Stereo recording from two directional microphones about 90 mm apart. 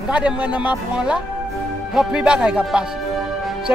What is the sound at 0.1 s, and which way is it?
Speech, 15° right (ahead or behind).